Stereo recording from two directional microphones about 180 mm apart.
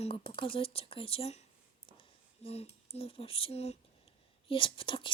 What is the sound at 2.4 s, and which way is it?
Speech, 35° left (ahead or behind).